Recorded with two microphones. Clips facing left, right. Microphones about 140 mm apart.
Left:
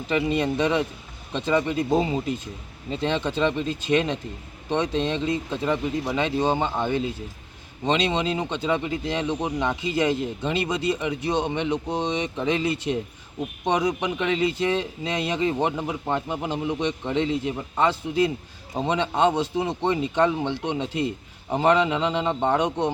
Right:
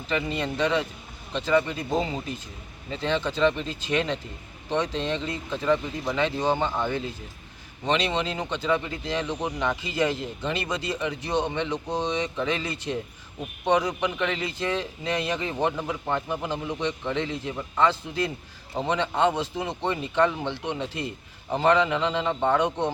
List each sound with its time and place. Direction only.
0.1 s speech: 20° left (ahead or behind)